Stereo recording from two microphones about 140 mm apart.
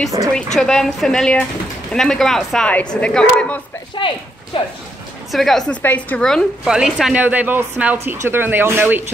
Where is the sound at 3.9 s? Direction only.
35° left (ahead or behind).